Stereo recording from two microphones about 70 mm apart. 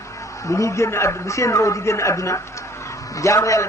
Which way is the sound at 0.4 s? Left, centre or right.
Left.